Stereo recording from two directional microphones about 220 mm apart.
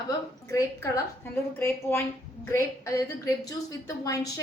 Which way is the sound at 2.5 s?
15° left (ahead or behind).